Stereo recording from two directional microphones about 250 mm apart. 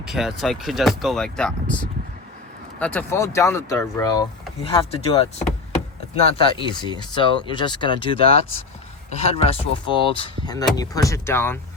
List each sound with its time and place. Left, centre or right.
0.0 s speech: centre